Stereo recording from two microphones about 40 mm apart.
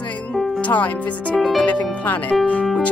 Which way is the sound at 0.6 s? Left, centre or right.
Left.